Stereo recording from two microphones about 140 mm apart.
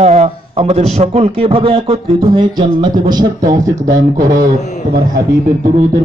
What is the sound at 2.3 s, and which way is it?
Music, 35° right (ahead or behind).